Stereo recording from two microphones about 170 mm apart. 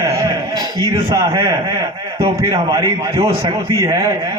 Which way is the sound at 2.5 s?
20° right (ahead or behind).